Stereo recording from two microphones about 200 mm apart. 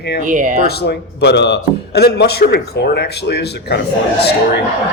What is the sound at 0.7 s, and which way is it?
A man's voice, 55° left (ahead or behind).